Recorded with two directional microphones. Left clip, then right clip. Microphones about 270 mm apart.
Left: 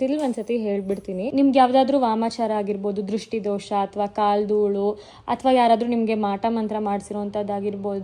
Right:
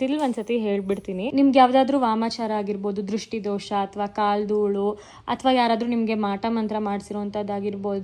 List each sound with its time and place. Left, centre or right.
0.0 s a woman's voice: centre
4.6 s speech: right
5.3 s a woman's voice: centre
6.6 s speech: right
7.3 s a woman's voice: centre